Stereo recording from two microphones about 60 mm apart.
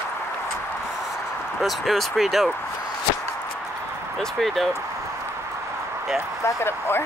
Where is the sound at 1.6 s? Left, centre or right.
Centre.